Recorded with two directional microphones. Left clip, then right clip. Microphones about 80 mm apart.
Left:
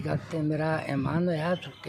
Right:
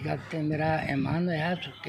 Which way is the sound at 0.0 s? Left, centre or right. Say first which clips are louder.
Left 1 dB; left.